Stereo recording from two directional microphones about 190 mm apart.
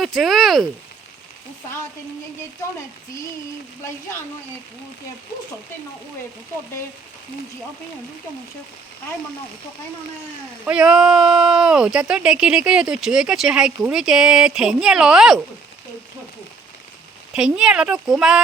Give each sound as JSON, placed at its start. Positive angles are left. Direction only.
{"t": 0.0, "sound": "speech", "side_deg": 0}
{"t": 10.7, "sound": "speech", "side_deg": -5}
{"t": 17.3, "sound": "speech", "side_deg": -5}